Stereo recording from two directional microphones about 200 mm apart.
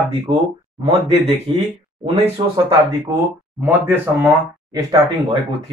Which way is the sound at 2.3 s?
25° right (ahead or behind).